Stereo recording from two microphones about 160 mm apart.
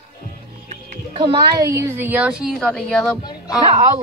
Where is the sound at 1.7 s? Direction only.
15° right (ahead or behind); by 3.1 s 5° left (ahead or behind).